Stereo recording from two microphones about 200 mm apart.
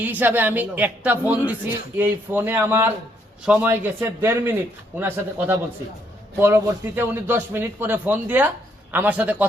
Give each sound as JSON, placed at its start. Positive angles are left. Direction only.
{"t": 0.0, "sound": "a man's voice", "side_deg": -10}